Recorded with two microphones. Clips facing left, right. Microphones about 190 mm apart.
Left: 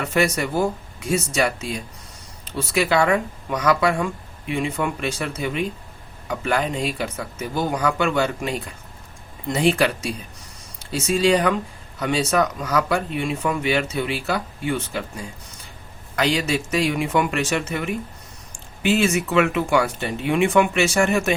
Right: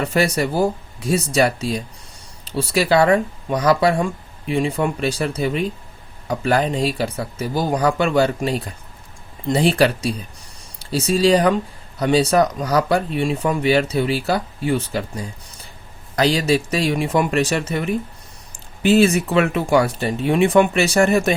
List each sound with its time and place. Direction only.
0.0 s speech: 35° right (ahead or behind)